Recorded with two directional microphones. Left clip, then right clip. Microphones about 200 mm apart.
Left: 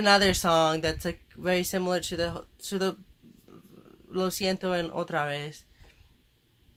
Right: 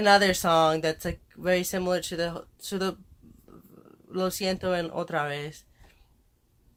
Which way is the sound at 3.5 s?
20° right (ahead or behind).